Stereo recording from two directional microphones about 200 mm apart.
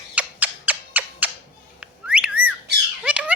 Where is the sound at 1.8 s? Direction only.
5° right (ahead or behind).